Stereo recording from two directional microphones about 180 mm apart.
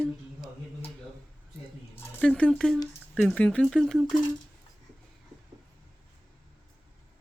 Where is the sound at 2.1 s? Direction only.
5° left (ahead or behind).